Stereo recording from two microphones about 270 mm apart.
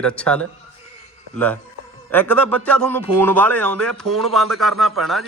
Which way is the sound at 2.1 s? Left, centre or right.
Centre.